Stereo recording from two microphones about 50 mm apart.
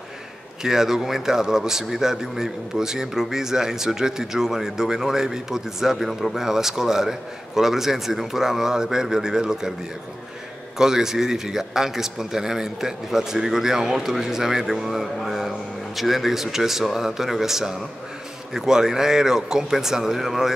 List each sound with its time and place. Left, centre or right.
0.6 s a man's voice: centre
10.8 s a man's voice: centre